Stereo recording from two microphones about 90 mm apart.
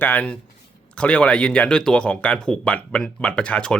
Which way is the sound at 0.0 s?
15° left (ahead or behind).